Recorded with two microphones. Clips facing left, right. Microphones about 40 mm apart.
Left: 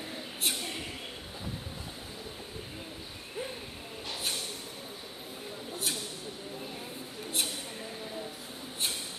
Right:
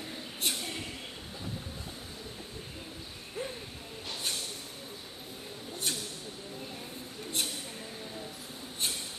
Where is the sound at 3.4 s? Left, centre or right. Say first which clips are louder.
Even; centre.